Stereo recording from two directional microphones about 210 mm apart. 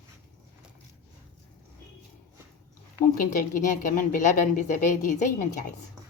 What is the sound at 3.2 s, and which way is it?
A woman's voice, 40° left (ahead or behind).